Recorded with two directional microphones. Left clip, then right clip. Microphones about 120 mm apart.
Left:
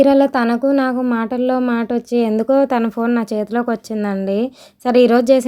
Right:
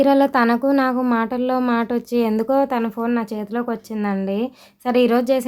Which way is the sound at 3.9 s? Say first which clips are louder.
Left 3 dB; 30° left (ahead or behind).